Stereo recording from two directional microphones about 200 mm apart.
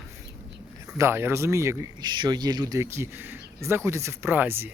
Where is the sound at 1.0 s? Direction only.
10° right (ahead or behind).